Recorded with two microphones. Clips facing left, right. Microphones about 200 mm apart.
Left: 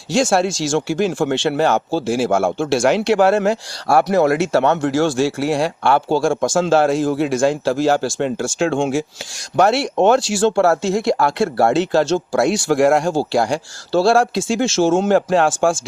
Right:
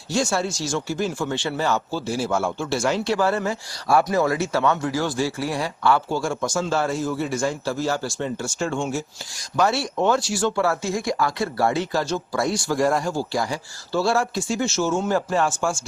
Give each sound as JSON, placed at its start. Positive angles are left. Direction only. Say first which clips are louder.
{"t": 0.1, "sound": "speech", "louder": "left 7 dB", "side_deg": 90}
{"t": 9.6, "sound": "speech", "louder": "left 6 dB", "side_deg": 65}